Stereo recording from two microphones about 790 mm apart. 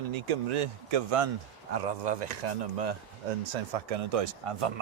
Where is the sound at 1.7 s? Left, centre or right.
Right.